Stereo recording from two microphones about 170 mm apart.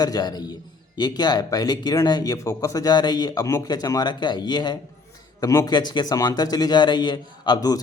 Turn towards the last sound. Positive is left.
turn(degrees=25)  # may be behind; listen again after turning